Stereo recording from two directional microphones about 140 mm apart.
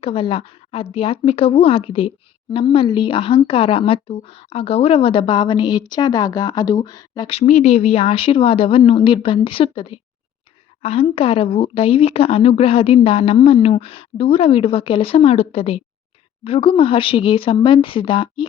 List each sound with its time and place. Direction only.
0.0 s speech: 40° left (ahead or behind)
7.3 s speech: 50° left (ahead or behind)